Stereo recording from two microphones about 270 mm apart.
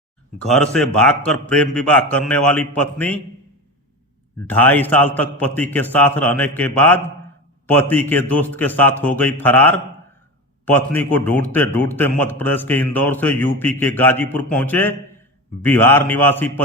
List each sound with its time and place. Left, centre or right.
0.4 s a man's voice: centre
4.4 s a man's voice: centre